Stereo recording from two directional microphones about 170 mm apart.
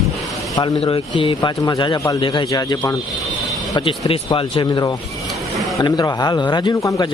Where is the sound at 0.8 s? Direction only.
30° left (ahead or behind).